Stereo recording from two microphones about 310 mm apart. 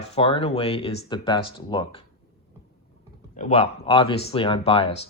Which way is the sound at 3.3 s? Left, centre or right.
Centre.